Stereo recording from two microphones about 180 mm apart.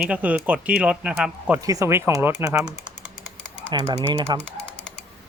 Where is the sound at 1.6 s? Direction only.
20° right (ahead or behind).